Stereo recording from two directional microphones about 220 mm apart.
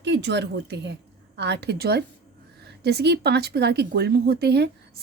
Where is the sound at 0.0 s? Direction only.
55° right (ahead or behind).